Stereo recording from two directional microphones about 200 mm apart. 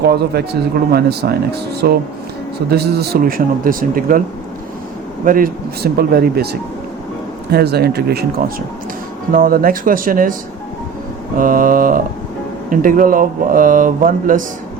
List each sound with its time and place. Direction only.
0.0 s speech: 55° right (ahead or behind)
5.2 s speech: 45° right (ahead or behind)
11.3 s speech: 45° right (ahead or behind)